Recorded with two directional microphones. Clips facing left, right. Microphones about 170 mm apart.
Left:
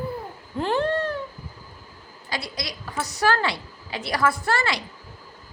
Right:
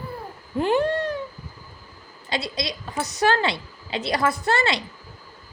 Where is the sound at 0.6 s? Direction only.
15° right (ahead or behind).